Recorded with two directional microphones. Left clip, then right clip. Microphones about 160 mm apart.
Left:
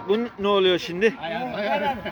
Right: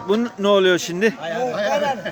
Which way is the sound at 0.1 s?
40° right (ahead or behind).